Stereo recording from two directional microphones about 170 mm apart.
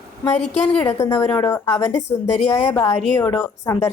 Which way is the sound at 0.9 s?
20° left (ahead or behind).